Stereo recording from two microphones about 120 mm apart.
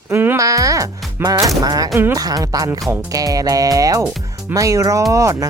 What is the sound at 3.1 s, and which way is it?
Speech, 30° right (ahead or behind).